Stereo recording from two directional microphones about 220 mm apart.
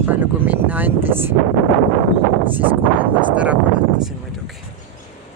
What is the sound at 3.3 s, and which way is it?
Speech, 5° right (ahead or behind).